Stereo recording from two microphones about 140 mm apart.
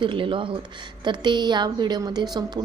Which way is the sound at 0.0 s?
35° right (ahead or behind).